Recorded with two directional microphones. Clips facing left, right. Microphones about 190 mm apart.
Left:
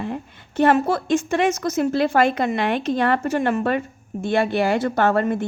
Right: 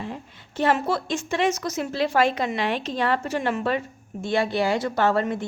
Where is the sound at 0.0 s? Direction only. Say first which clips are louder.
Left 6 dB; 55° left (ahead or behind).